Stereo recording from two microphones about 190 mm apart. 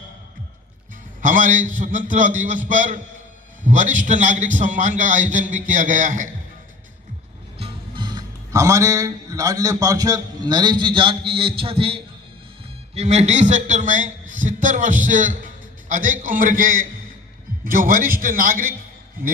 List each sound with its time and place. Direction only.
1.2 s a man's voice: 45° right (ahead or behind)
7.6 s a man's voice: 25° right (ahead or behind); by 18.7 s 45° right (ahead or behind)